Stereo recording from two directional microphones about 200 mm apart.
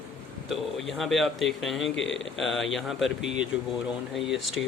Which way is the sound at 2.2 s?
Centre (ahead or behind).